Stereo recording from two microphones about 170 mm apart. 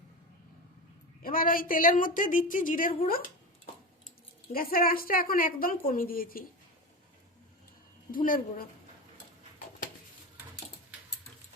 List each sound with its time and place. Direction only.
1.2 s a woman's voice: 55° left (ahead or behind)
4.5 s a woman's voice: 60° left (ahead or behind)
8.1 s a woman's voice: 55° left (ahead or behind)